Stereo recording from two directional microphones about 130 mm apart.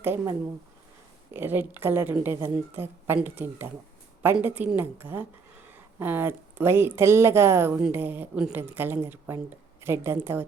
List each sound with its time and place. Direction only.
0.0 s a woman's voice: 15° right (ahead or behind)